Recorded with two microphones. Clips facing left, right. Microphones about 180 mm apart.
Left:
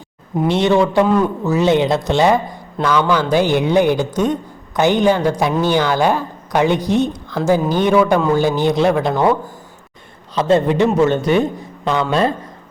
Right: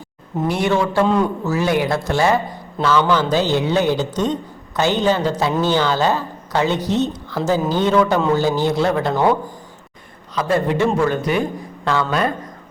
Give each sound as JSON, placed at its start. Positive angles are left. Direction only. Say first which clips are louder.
{"t": 0.4, "sound": "speech", "louder": "left 4 dB", "side_deg": 25}
{"t": 1.0, "sound": "a man's voice", "louder": "left 2 dB", "side_deg": 5}
{"t": 1.5, "sound": "speech", "louder": "left 4 dB", "side_deg": 20}
{"t": 10.3, "sound": "speech", "louder": "left 4 dB", "side_deg": 25}